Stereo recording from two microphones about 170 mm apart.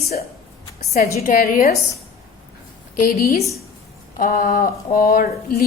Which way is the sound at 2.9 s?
60° left (ahead or behind).